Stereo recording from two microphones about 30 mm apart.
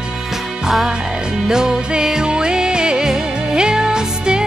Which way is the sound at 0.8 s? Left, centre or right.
Centre.